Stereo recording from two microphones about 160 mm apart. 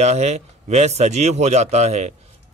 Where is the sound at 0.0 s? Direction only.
45° right (ahead or behind).